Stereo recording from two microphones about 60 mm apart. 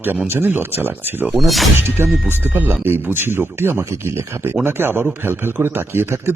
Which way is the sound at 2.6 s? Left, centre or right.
Right.